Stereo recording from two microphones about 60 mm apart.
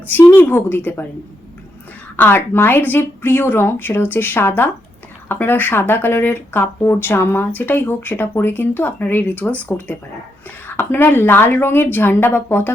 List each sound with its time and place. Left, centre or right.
0.1 s speech: left
2.1 s speech: left